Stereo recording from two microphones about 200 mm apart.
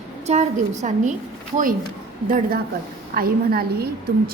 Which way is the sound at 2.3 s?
50° right (ahead or behind).